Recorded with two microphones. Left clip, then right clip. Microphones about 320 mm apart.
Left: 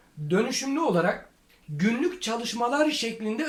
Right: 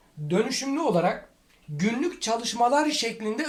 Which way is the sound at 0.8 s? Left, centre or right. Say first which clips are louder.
Right 1 dB; centre.